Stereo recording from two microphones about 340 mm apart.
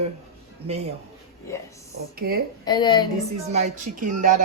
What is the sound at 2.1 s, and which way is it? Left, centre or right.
Speech, right.